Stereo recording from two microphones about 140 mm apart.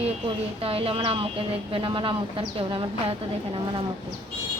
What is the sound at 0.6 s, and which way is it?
Speech, 45° right (ahead or behind).